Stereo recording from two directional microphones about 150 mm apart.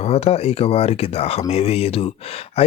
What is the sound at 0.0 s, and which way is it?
Speech, 40° left (ahead or behind).